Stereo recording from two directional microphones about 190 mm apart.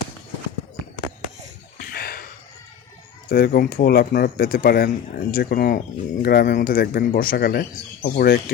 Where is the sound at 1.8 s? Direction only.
50° left (ahead or behind).